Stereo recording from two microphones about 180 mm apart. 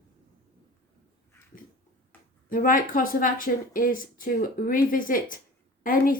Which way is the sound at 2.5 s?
50° left (ahead or behind).